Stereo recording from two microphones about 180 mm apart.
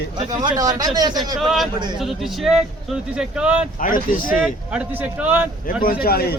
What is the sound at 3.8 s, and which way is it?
Speech, 50° left (ahead or behind).